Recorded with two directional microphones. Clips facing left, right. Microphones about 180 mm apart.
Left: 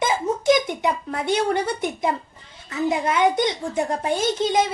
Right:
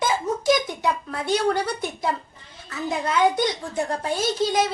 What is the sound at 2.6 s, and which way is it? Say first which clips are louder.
A child's voice: left 4 dB; 20° left (ahead or behind).